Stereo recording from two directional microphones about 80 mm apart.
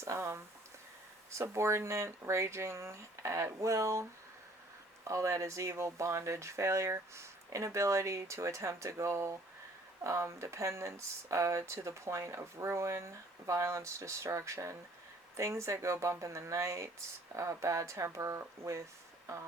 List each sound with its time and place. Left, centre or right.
0.0 s speech: right
5.0 s speech: right